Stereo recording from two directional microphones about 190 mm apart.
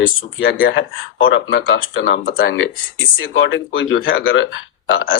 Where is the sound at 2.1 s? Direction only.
55° left (ahead or behind).